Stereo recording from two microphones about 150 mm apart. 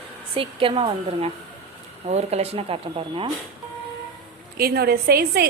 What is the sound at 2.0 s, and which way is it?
Speech, 45° right (ahead or behind).